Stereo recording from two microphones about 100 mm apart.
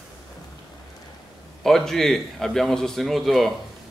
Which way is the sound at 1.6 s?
5° left (ahead or behind).